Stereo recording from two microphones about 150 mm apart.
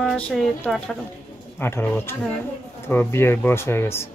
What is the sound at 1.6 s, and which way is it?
Speech, 15° left (ahead or behind).